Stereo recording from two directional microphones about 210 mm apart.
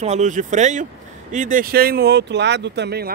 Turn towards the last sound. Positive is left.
turn(degrees=-50)  # may be behind; listen again after turning